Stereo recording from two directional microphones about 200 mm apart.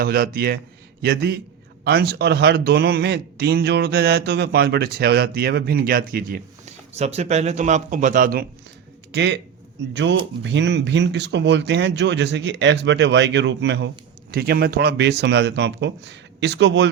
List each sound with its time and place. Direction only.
0.0 s speech: 50° right (ahead or behind)
9.1 s speech: 60° right (ahead or behind)